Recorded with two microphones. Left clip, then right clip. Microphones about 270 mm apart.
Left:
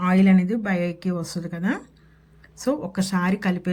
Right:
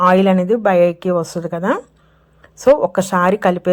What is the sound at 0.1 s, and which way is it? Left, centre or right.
A woman's voice, right.